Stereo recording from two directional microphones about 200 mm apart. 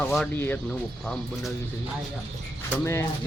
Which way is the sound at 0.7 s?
Centre (ahead or behind).